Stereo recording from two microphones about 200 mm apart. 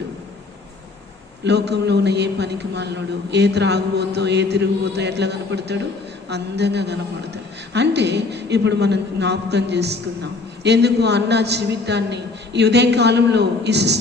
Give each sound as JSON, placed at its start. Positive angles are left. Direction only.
{"t": 1.5, "sound": "a man's voice", "side_deg": -55}